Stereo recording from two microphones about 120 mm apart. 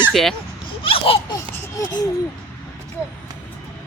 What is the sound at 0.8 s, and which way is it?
Speech, 50° left (ahead or behind).